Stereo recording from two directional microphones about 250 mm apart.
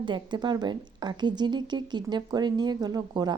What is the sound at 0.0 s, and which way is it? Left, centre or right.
A woman's voice, centre.